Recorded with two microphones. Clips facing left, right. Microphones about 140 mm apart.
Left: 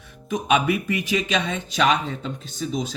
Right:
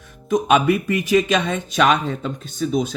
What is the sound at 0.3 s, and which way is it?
Speech, 45° right (ahead or behind).